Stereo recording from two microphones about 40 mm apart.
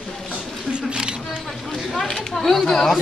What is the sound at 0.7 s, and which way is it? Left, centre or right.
Single-lens reflex camera, right.